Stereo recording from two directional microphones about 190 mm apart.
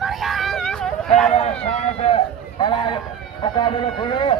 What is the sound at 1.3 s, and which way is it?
A man's voice, 35° left (ahead or behind).